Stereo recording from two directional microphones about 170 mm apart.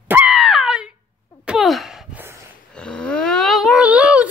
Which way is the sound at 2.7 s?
5° left (ahead or behind).